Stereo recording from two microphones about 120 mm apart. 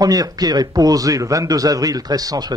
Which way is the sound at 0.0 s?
30° right (ahead or behind).